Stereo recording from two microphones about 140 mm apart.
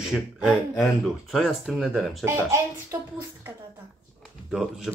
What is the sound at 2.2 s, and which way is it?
A child's voice, 20° right (ahead or behind).